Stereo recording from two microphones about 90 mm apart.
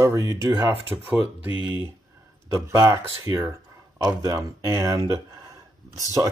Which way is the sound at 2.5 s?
35° right (ahead or behind).